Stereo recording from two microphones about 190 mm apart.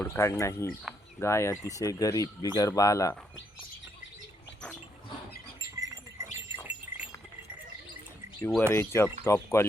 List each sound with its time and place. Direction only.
0.0 s speech: 15° left (ahead or behind)
5.8 s a sound: 15° right (ahead or behind)
8.4 s speech: 10° left (ahead or behind)